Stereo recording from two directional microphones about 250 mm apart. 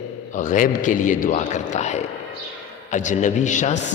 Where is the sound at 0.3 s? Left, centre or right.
Left.